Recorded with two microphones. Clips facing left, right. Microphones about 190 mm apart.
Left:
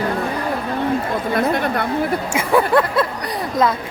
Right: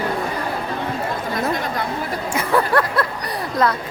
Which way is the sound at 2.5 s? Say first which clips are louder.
Left 3 dB; 20° left (ahead or behind).